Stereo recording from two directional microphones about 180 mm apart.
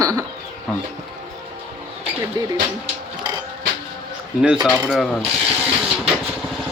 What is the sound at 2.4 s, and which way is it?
Speech, 20° right (ahead or behind).